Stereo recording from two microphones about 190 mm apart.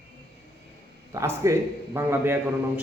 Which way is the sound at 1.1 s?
15° right (ahead or behind).